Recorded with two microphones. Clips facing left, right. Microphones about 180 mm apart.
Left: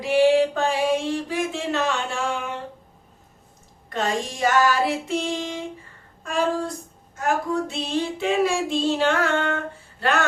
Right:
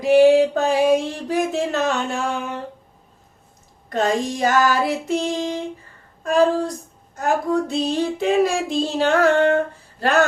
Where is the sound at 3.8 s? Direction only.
40° right (ahead or behind).